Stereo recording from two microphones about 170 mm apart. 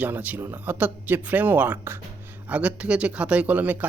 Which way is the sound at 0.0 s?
10° right (ahead or behind).